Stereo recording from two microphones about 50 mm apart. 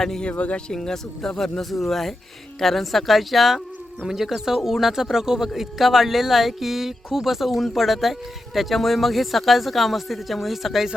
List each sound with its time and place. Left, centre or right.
0.0 s speech: centre
0.3 s speech: left
0.7 s speech: centre